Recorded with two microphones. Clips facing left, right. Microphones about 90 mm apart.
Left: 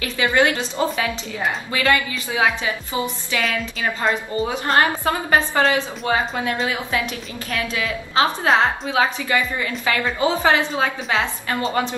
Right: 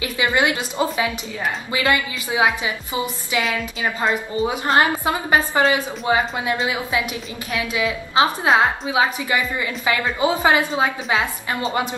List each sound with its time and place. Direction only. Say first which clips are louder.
0.0 s a woman's voice: left 1 dB; 15° right (ahead or behind)
4.6 s a woman's voice: even; 10° right (ahead or behind)
7.5 s a woman's voice: right 2 dB; 15° right (ahead or behind)